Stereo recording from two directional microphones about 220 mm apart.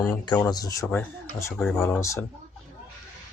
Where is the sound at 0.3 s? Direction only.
15° left (ahead or behind).